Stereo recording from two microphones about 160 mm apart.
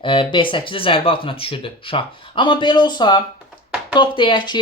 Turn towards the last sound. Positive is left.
turn(degrees=30)  # may be behind; listen again after turning